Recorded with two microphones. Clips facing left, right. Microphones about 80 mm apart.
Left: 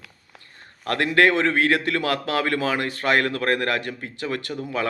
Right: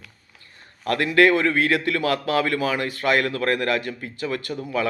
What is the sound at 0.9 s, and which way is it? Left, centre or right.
A man's voice, left.